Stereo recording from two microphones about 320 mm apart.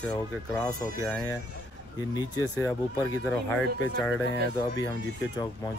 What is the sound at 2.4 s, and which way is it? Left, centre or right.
Speech, centre.